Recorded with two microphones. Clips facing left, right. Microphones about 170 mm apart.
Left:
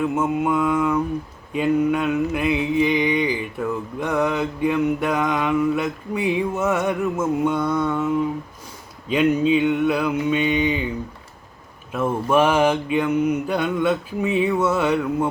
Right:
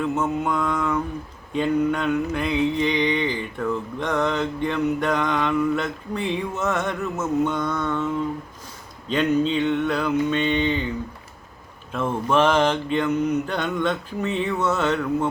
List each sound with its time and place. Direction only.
0.0 s mantra: 10° left (ahead or behind)
11.9 s mantra: 10° left (ahead or behind)